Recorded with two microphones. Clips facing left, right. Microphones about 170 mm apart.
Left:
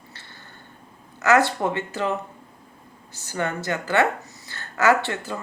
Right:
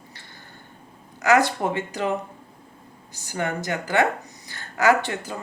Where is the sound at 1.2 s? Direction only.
15° right (ahead or behind).